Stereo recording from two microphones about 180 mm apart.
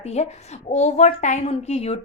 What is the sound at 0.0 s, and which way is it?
A woman's voice, 35° left (ahead or behind).